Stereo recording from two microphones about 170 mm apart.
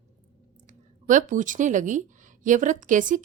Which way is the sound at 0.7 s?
45° right (ahead or behind).